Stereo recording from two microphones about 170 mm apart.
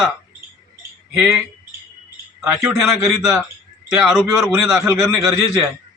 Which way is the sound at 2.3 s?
Centre (ahead or behind).